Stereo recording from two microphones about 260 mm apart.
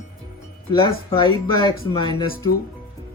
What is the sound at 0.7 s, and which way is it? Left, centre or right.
Speech, centre.